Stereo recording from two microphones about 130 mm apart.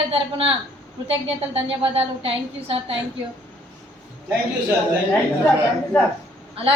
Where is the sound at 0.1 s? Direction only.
45° right (ahead or behind).